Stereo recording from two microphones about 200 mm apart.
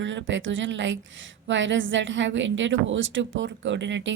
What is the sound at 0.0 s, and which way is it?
A woman's voice, 65° right (ahead or behind).